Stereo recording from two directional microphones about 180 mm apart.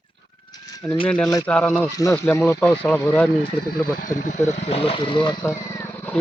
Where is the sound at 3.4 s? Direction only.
60° left (ahead or behind).